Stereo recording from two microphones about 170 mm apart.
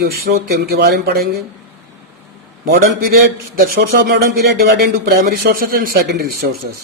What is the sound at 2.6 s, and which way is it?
A man's voice, 60° right (ahead or behind).